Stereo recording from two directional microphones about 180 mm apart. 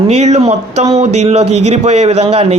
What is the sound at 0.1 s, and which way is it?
Speech, 40° right (ahead or behind).